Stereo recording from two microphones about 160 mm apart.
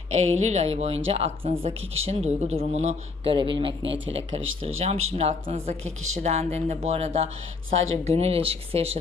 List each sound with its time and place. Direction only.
0.1 s speech: 40° right (ahead or behind)